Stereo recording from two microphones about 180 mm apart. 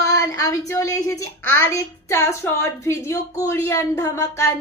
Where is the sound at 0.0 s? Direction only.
15° left (ahead or behind).